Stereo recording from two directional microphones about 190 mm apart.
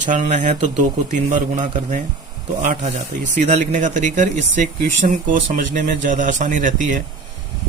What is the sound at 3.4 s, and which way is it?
Speech, 40° right (ahead or behind).